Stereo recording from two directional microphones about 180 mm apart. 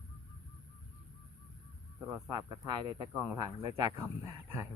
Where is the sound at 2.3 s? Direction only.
25° right (ahead or behind).